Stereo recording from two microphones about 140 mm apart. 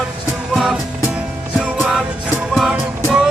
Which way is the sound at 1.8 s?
Centre (ahead or behind).